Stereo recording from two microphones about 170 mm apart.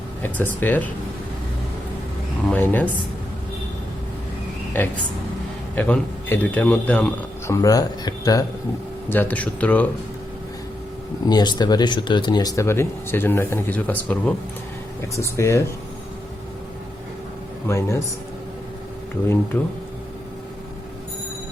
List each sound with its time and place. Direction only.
0.2 s speech: 10° left (ahead or behind)
2.5 s speech: 10° left (ahead or behind)
4.7 s a man's voice: 10° left (ahead or behind)
9.0 s speech: 10° left (ahead or behind)
11.3 s speech: 25° left (ahead or behind)
17.7 s speech: 15° left (ahead or behind)
19.5 s speech: 10° left (ahead or behind)